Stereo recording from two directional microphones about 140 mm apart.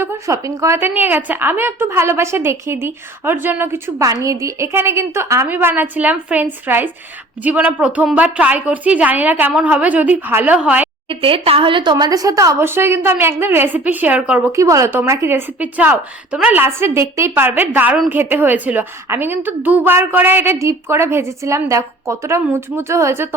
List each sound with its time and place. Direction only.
0.0 s a woman's voice: 20° right (ahead or behind)
11.1 s a woman's voice: 40° right (ahead or behind); by 14.4 s 10° right (ahead or behind)
14.5 s a woman's voice: 20° right (ahead or behind)